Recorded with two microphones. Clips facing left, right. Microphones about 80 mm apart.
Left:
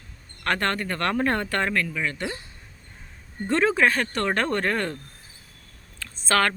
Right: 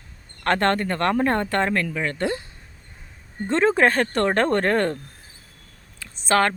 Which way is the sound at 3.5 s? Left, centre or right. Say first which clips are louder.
Right 2 dB; right.